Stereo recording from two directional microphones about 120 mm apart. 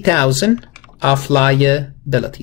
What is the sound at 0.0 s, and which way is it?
Speech, 20° left (ahead or behind).